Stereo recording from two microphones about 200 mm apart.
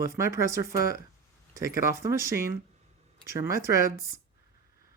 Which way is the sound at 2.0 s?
15° right (ahead or behind).